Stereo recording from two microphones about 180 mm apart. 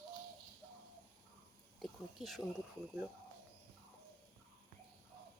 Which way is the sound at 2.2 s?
Centre (ahead or behind).